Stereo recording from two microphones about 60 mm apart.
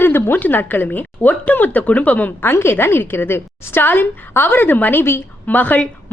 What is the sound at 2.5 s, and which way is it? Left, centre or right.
A woman's voice, left.